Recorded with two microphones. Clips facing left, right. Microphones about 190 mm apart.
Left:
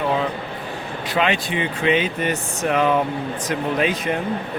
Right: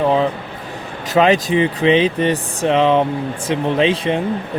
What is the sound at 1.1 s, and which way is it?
Speech, 40° right (ahead or behind).